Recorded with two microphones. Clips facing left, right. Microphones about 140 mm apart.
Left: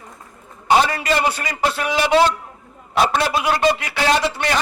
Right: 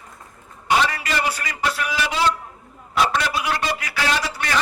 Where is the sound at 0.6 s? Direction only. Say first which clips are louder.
Left 4 dB; 30° left (ahead or behind).